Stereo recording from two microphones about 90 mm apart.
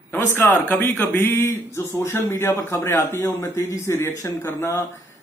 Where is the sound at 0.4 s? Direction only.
20° left (ahead or behind).